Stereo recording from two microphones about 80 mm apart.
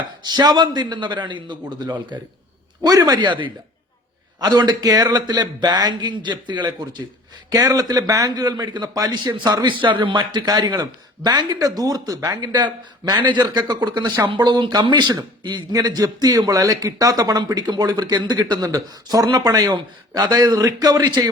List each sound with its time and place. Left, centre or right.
0.2 s a man's voice: right
3.2 s speech: right
4.4 s a man's voice: right
7.5 s a man's voice: right
12.4 s a man's voice: right
13.4 s a man's voice: right
15.7 s a man's voice: right